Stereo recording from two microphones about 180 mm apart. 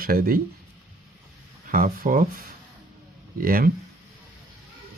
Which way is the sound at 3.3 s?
55° right (ahead or behind).